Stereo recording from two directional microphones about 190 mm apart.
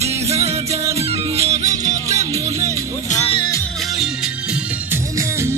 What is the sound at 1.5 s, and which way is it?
Music, 40° right (ahead or behind).